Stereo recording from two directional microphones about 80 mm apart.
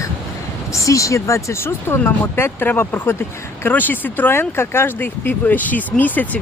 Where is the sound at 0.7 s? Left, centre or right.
Left.